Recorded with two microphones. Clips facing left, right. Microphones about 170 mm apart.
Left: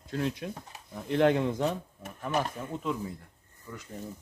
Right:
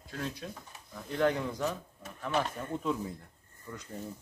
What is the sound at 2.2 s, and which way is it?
Speech, 10° left (ahead or behind).